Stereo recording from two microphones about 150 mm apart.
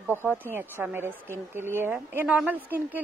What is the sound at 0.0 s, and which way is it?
Speech, 15° right (ahead or behind).